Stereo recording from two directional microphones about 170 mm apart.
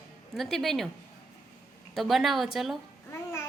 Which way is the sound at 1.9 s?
Centre (ahead or behind).